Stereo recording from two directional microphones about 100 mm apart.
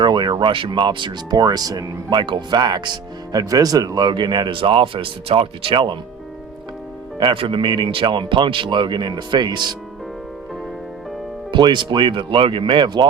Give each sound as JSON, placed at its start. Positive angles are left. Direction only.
{"t": 0.0, "sound": "speech", "side_deg": -45}
{"t": 7.2, "sound": "speech", "side_deg": -55}
{"t": 11.5, "sound": "speech", "side_deg": -50}